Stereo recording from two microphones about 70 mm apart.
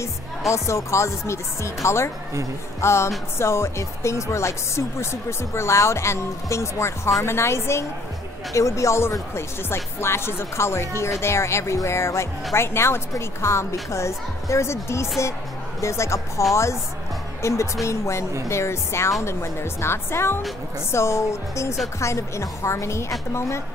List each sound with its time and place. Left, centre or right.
0.5 s speech: left